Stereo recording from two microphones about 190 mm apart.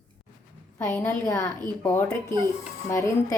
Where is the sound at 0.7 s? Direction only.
10° left (ahead or behind).